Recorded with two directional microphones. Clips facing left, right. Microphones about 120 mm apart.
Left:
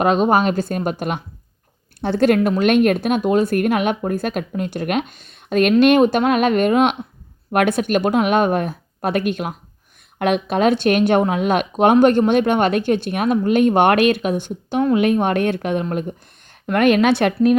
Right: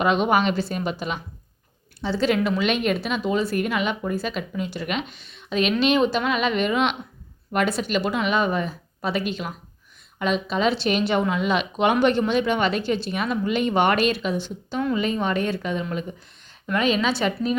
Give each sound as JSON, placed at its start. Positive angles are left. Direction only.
{"t": 0.0, "sound": "speech", "side_deg": 40}
{"t": 7.5, "sound": "speech", "side_deg": 60}